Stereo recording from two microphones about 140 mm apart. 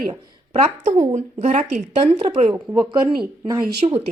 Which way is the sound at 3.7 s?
45° right (ahead or behind).